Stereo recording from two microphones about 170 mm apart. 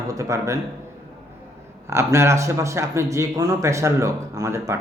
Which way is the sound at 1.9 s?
15° right (ahead or behind).